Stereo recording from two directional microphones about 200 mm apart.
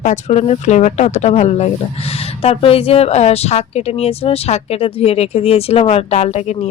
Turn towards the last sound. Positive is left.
turn(degrees=35)  # may be behind; listen again after turning